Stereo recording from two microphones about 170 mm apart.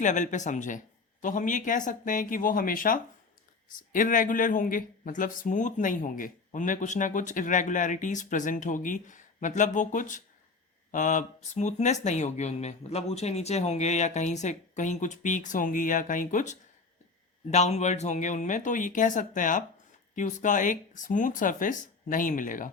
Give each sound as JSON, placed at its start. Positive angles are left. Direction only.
{"t": 0.0, "sound": "a man's voice", "side_deg": 45}